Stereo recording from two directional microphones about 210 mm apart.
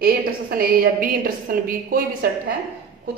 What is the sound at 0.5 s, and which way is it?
Speech, 45° right (ahead or behind).